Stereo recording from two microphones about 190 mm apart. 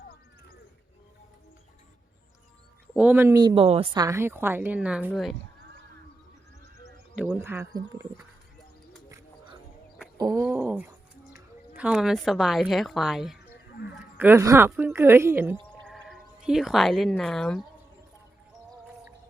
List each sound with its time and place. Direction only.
2.9 s speech: 10° right (ahead or behind); by 4.0 s 30° right (ahead or behind)
4.0 s a woman's voice: 15° right (ahead or behind)
7.3 s a woman's voice: 15° right (ahead or behind)
9.0 s music: 15° right (ahead or behind)
10.2 s a sound: 20° right (ahead or behind)
10.4 s a woman's voice: 10° right (ahead or behind)
14.2 s a woman's voice: 10° right (ahead or behind)
15.9 s speech: centre (ahead or behind)